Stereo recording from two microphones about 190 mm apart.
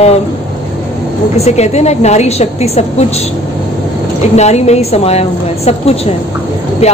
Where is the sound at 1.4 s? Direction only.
35° left (ahead or behind).